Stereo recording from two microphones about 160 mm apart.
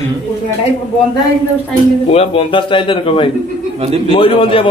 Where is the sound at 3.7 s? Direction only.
40° right (ahead or behind).